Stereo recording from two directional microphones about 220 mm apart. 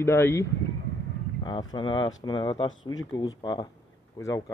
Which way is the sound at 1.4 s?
20° left (ahead or behind).